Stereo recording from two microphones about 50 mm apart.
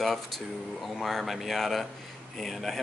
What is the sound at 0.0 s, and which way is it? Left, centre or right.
Speech, centre.